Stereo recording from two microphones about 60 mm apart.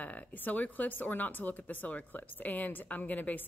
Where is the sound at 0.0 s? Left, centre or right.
Left.